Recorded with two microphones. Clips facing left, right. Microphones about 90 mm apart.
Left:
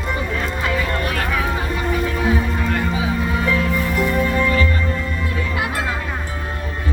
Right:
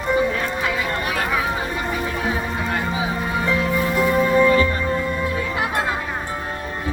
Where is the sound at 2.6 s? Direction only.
10° right (ahead or behind).